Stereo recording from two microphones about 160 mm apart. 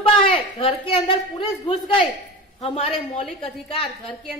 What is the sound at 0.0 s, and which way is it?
Speech, 35° left (ahead or behind).